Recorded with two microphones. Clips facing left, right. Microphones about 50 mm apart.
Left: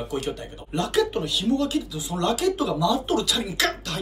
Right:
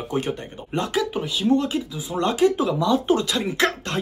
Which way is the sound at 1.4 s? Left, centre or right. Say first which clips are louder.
Right 4 dB; right.